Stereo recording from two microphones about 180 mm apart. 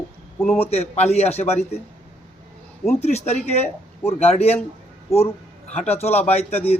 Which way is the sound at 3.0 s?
35° left (ahead or behind).